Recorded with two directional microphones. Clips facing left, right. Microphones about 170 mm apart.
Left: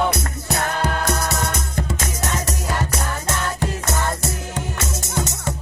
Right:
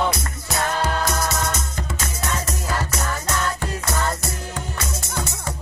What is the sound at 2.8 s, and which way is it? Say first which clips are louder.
Music: left 1 dB; 25° left (ahead or behind).